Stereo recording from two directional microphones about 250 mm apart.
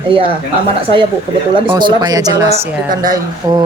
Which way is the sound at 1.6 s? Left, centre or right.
Centre.